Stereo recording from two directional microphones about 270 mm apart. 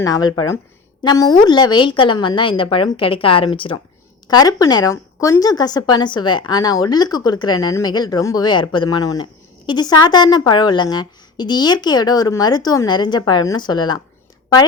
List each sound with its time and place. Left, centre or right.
0.0 s speech: centre